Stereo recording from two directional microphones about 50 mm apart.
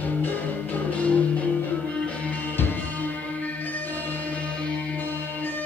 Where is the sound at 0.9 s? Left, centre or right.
Left.